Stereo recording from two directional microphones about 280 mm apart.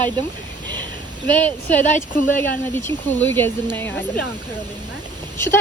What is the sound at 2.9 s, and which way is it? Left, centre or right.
Speech, centre.